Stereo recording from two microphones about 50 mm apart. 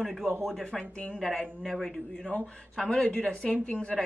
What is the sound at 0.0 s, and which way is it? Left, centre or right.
Speech, centre.